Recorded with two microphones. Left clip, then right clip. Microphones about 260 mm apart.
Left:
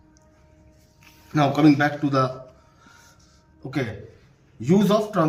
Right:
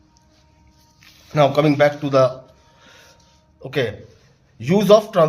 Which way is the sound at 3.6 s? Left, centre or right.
Right.